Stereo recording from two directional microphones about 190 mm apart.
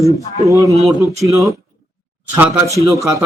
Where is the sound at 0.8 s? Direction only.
15° right (ahead or behind).